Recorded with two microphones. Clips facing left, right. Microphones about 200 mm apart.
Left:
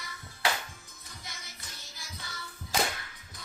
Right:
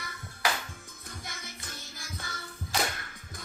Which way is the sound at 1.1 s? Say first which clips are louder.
Right 5 dB; 50° right (ahead or behind).